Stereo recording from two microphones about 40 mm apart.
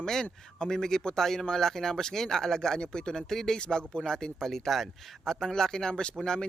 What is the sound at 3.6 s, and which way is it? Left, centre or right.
A man's voice, left.